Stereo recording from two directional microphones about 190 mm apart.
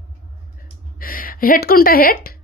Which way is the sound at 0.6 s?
50° left (ahead or behind).